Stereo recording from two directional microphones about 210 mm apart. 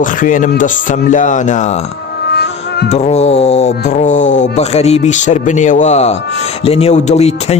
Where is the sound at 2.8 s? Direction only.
30° left (ahead or behind).